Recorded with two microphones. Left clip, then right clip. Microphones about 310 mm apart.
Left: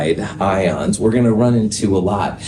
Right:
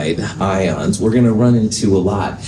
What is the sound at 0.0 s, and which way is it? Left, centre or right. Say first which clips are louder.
Speech: left 2 dB; left.